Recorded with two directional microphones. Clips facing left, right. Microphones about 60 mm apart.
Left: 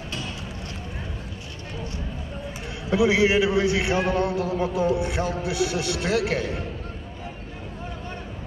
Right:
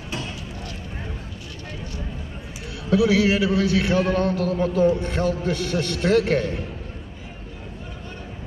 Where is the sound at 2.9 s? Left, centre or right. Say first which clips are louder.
Right 1 dB; left; by 6.6 s centre.